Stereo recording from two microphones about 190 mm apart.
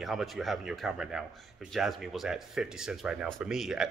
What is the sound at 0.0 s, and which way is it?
Speech, centre (ahead or behind).